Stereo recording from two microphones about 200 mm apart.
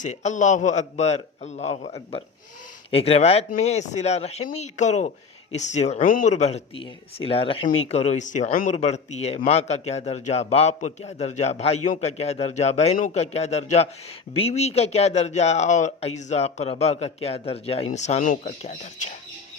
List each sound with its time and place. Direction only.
0.0 s speech: 35° left (ahead or behind)